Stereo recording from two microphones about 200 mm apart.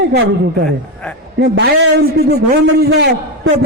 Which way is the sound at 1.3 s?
55° right (ahead or behind).